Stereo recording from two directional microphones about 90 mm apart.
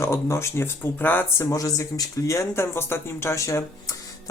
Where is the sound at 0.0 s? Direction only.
30° left (ahead or behind).